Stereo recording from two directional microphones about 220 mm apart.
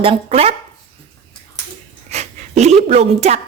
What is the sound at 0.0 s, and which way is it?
Speech, 25° right (ahead or behind).